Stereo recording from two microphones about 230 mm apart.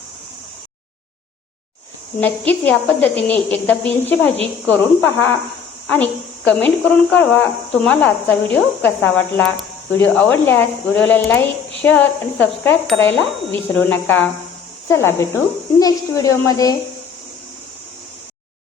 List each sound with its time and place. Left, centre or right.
2.2 s speech: centre